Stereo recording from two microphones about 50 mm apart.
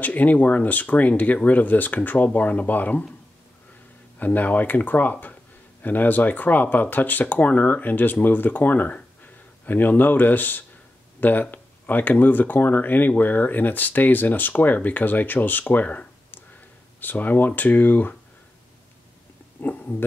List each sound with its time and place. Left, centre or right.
0.0 s speech: left
4.2 s speech: left
19.6 s speech: left